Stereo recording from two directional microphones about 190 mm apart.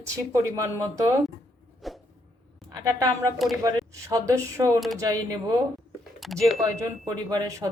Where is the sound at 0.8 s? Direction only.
15° right (ahead or behind).